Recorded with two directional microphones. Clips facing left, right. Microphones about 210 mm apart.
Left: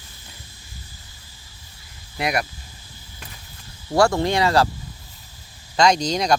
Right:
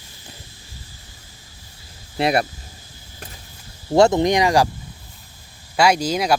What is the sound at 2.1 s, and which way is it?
Speech, 30° right (ahead or behind).